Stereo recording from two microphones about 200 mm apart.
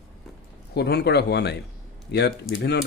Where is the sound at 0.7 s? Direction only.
55° left (ahead or behind).